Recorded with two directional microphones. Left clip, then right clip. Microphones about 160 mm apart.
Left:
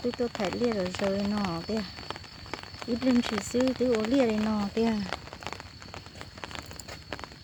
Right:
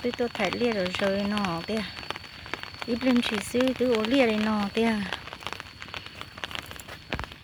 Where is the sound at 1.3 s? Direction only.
5° right (ahead or behind).